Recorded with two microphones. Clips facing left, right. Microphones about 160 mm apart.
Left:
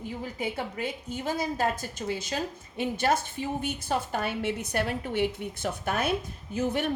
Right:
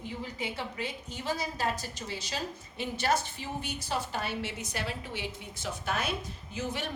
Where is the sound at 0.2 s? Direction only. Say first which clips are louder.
Left 5 dB; 50° left (ahead or behind).